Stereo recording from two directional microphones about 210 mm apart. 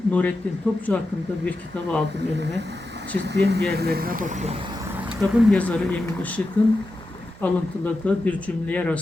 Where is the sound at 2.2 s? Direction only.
55° right (ahead or behind); by 4.6 s 35° right (ahead or behind).